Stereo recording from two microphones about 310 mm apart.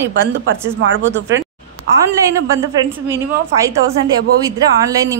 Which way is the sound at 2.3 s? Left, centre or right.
Centre.